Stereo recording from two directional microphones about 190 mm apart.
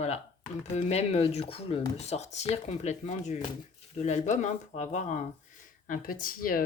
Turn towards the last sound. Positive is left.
turn(degrees=50)  # may be behind; listen again after turning